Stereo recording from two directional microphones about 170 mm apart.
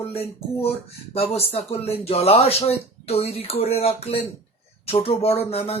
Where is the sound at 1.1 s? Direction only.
35° left (ahead or behind).